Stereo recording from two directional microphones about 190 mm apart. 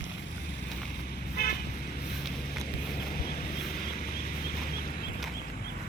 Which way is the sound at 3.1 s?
50° left (ahead or behind).